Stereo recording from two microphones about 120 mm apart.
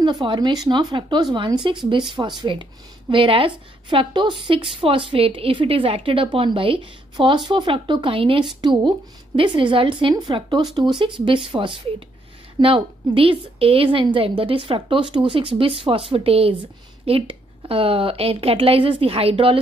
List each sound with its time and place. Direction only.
0.0 s a woman's voice: 40° right (ahead or behind)